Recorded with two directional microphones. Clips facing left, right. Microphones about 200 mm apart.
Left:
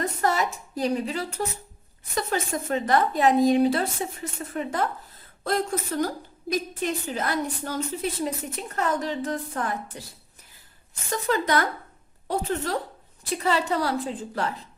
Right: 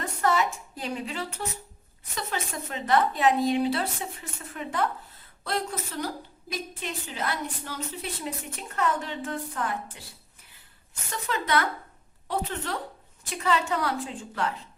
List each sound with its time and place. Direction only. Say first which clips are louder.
0.0 s a sound: left 1 dB; 40° left (ahead or behind)
2.1 s a woman's voice: left 6 dB; 45° left (ahead or behind)
11.1 s a woman's voice: left 4 dB; 40° left (ahead or behind)